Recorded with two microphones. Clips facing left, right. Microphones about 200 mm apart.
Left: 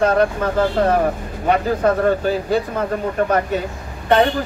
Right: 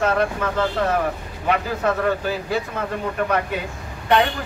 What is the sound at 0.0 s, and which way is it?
Speech, 30° left (ahead or behind).